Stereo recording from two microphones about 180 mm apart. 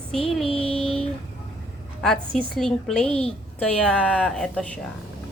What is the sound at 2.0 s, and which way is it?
A woman's voice, 5° left (ahead or behind).